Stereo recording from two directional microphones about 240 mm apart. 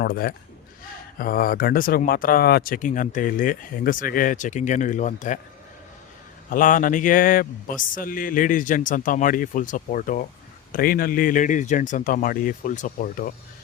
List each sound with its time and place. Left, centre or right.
0.0 s speech: left
6.5 s speech: left